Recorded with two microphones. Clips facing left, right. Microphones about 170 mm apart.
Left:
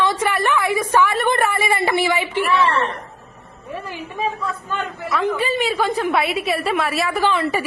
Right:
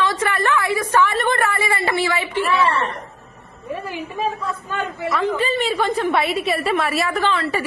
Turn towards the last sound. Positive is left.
turn(degrees=10)  # may be behind; listen again after turning